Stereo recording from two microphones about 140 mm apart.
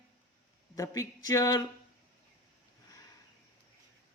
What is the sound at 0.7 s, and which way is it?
Speech, 25° left (ahead or behind).